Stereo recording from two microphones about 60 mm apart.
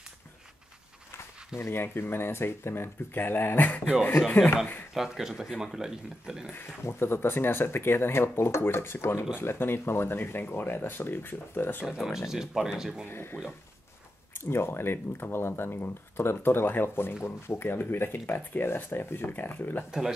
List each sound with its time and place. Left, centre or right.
1.6 s speech: left
4.9 s speech: centre
6.5 s speech: left
11.9 s speech: centre
13.1 s speech: left